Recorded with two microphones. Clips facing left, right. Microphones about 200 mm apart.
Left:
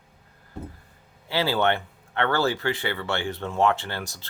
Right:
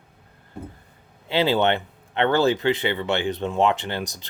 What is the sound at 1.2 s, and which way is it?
Speech, 20° right (ahead or behind).